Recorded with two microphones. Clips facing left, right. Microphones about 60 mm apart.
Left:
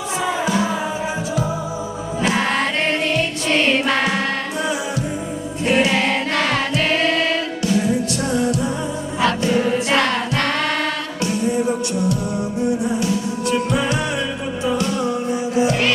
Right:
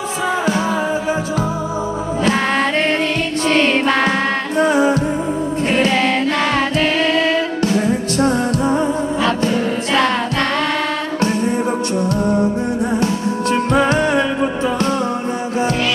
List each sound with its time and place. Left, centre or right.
4.6 s music: right
7.6 s music: right
11.2 s music: right